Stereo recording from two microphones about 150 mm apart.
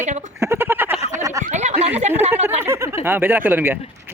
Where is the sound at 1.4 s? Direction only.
50° right (ahead or behind).